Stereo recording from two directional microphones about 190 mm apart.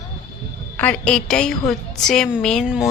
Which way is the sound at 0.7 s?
5° left (ahead or behind).